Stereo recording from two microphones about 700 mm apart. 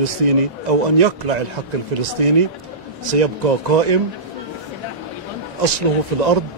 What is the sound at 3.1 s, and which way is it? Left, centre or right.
Speech, right.